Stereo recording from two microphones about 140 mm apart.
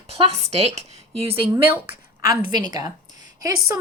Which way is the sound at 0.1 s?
45° right (ahead or behind).